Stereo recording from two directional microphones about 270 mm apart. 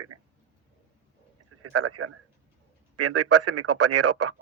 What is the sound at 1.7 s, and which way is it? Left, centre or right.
Speech, right.